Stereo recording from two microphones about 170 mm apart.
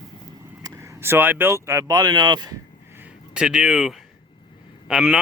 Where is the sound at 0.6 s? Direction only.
20° right (ahead or behind).